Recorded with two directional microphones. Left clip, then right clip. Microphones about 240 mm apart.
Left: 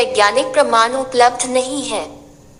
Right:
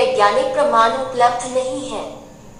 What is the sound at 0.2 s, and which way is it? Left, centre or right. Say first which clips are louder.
A woman's voice: left 2 dB; left.